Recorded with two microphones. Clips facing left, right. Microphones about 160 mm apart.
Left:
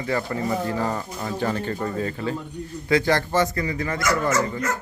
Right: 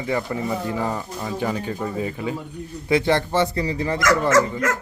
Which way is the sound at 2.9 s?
25° right (ahead or behind).